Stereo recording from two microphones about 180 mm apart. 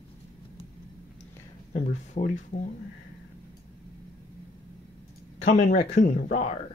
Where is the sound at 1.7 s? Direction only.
40° left (ahead or behind).